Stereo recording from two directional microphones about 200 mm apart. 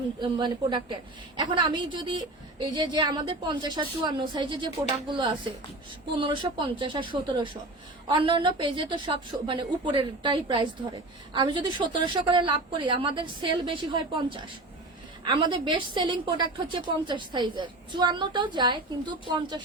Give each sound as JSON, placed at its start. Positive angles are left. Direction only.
{"t": 0.2, "sound": "speech", "side_deg": -20}
{"t": 6.7, "sound": "speech", "side_deg": -25}
{"t": 15.2, "sound": "speech", "side_deg": -20}